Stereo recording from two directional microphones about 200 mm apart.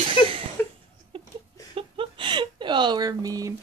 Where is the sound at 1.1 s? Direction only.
25° right (ahead or behind).